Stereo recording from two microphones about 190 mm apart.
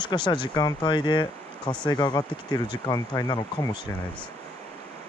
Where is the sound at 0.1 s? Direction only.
25° left (ahead or behind).